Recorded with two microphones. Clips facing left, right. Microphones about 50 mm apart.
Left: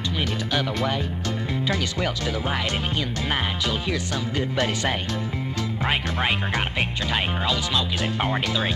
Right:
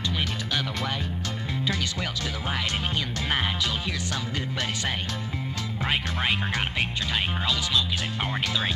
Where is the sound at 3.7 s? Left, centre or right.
Left.